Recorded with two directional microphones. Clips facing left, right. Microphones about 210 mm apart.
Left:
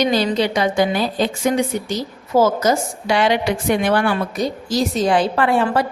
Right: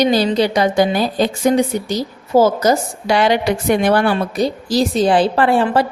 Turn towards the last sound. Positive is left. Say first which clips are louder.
# right 3 dB
turn(degrees=-30)  # may be behind; listen again after turning